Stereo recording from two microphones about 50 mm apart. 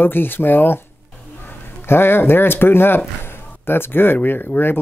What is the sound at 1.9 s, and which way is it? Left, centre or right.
Speech, left.